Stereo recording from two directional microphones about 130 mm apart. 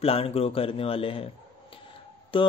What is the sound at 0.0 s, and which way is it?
Speech, 50° left (ahead or behind).